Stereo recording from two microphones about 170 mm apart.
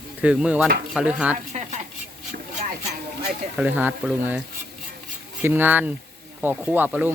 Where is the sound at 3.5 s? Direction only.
10° right (ahead or behind).